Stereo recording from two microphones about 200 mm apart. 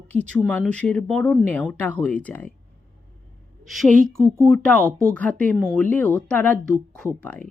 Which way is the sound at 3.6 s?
Centre (ahead or behind).